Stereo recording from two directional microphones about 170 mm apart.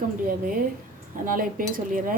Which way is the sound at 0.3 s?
55° right (ahead or behind).